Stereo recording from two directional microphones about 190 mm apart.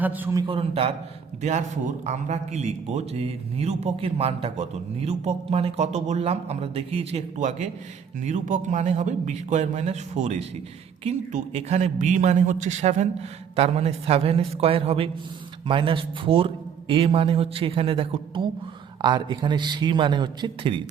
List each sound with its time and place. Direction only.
0.0 s a man's voice: 10° right (ahead or behind)
0.4 s a man's voice: 30° right (ahead or behind)